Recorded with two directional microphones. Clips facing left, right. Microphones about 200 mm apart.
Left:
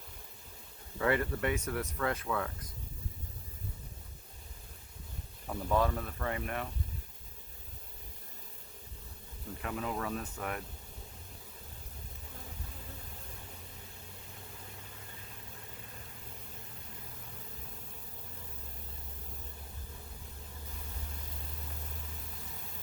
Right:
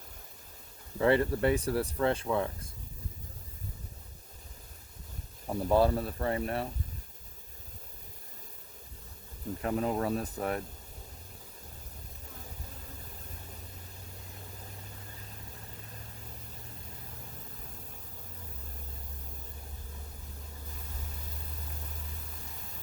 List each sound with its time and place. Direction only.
0.9 s speech: 30° right (ahead or behind)
5.5 s speech: 35° right (ahead or behind)
9.6 s speech: 35° right (ahead or behind)